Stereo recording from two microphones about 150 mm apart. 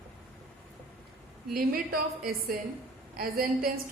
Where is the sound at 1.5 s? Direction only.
80° right.